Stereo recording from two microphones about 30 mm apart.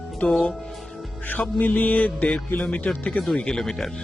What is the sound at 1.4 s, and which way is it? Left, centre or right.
Music, left.